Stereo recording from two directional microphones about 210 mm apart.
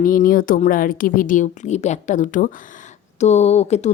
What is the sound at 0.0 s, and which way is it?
Speech, 40° left (ahead or behind).